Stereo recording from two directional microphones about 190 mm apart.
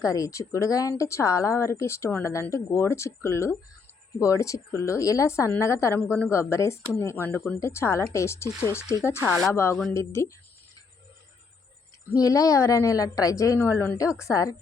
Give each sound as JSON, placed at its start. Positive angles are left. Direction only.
{"t": 0.0, "sound": "speech", "side_deg": 15}
{"t": 12.1, "sound": "speech", "side_deg": 20}